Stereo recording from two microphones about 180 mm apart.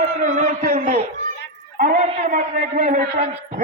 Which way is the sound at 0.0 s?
45° right (ahead or behind).